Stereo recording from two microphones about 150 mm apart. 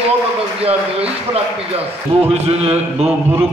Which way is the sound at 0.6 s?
40° right (ahead or behind).